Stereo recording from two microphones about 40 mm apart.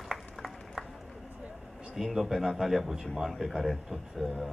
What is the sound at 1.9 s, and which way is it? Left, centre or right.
Speech, centre.